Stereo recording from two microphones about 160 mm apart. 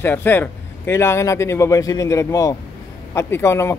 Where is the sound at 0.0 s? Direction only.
15° left (ahead or behind).